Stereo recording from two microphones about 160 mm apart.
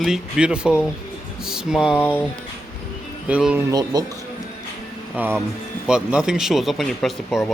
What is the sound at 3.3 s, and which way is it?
Speech, 5° right (ahead or behind).